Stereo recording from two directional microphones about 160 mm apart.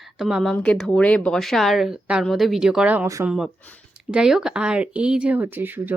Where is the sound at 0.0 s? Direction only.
Centre (ahead or behind).